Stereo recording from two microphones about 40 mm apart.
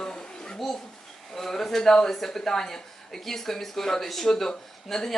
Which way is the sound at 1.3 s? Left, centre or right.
Centre.